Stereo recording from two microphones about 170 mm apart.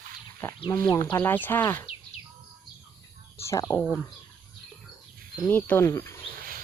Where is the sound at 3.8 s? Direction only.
5° left (ahead or behind).